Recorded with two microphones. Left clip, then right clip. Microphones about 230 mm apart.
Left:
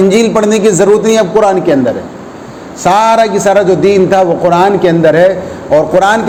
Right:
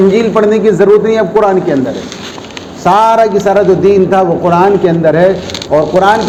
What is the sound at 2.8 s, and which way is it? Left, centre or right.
A man's voice, left.